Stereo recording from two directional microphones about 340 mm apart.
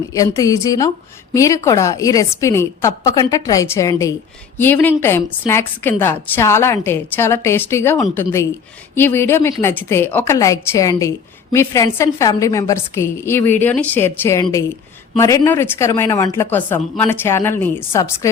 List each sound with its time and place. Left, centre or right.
0.1 s a woman's voice: centre